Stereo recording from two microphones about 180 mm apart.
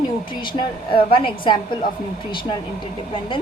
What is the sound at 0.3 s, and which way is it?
A woman's voice, 25° left (ahead or behind).